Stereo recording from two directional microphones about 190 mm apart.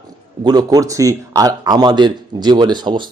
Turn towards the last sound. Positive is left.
turn(degrees=-25)  # may be behind; listen again after turning